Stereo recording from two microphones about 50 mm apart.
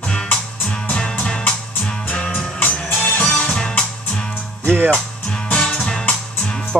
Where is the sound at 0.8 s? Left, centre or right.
Centre.